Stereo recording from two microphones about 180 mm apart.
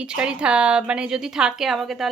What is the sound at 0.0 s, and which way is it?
A woman's voice, 5° right (ahead or behind).